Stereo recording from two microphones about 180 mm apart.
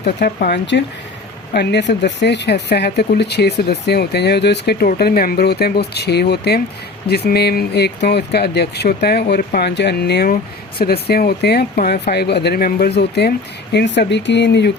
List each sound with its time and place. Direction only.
0.0 s speech: 60° left (ahead or behind)